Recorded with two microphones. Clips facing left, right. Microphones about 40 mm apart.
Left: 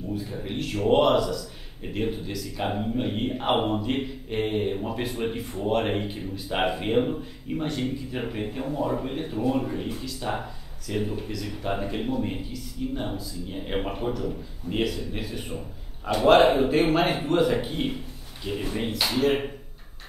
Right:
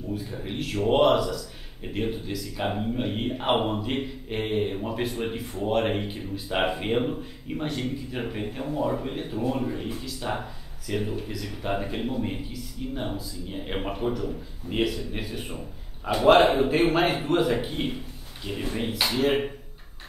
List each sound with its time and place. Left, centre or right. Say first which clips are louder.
0.4 s a man's voice: even; centre
10.9 s a man's voice: even; centre